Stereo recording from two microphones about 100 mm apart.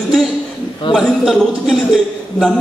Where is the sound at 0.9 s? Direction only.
Centre (ahead or behind).